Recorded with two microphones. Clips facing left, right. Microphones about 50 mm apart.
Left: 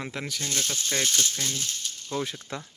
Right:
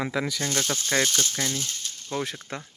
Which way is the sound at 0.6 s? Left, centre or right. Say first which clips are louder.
Right 4 dB; right.